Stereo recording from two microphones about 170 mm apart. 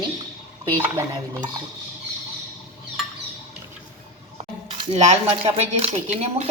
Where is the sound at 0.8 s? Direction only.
15° right (ahead or behind).